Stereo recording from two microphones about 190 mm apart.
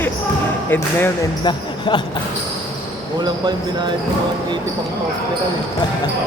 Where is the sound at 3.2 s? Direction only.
20° right (ahead or behind).